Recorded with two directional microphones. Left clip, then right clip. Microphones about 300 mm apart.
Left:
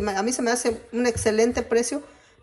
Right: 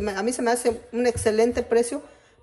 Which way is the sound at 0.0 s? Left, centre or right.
Centre.